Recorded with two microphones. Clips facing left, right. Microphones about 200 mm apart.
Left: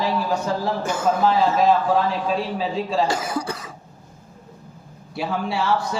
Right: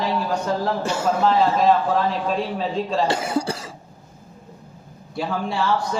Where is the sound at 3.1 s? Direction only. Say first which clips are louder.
Right 2 dB; 25° right (ahead or behind).